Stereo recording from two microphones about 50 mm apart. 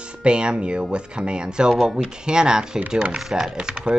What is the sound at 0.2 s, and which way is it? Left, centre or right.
Speech, centre.